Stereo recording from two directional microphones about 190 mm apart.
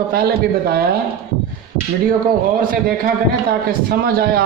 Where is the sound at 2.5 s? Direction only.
50° right (ahead or behind).